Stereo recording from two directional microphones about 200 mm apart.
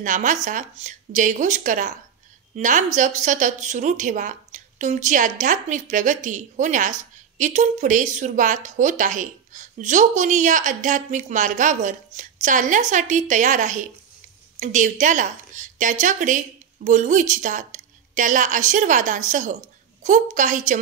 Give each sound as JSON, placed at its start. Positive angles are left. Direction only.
{"t": 0.0, "sound": "a woman's voice", "side_deg": -40}